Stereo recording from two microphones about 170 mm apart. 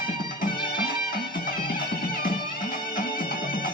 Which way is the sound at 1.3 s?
55° left (ahead or behind).